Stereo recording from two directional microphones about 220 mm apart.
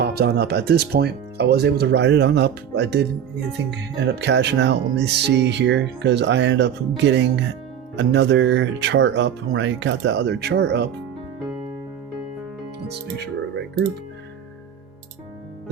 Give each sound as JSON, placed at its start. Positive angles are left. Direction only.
{"t": 0.0, "sound": "speech", "side_deg": -45}